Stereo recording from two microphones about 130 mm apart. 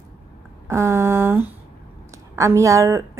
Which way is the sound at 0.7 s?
20° right (ahead or behind).